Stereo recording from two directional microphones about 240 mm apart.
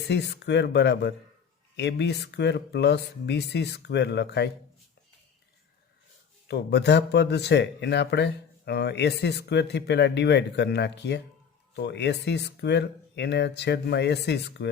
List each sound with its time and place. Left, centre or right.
0.1 s speech: left
6.5 s speech: left